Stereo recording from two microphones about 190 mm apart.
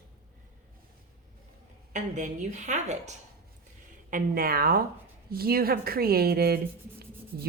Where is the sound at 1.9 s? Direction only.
40° right (ahead or behind).